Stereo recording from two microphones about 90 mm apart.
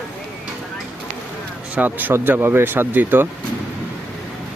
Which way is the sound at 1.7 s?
20° right (ahead or behind).